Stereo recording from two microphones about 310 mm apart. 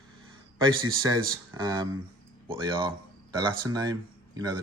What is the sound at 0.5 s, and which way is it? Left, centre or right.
Speech, centre.